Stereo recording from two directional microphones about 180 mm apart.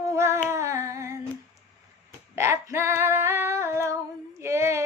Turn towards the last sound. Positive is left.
turn(degrees=-15)  # may be behind; listen again after turning